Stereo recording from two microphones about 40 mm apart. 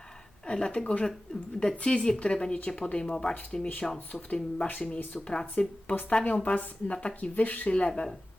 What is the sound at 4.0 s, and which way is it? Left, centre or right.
Speech, left.